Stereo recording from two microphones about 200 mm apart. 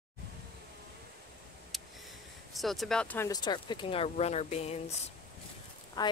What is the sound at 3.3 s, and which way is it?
Speech, 20° left (ahead or behind).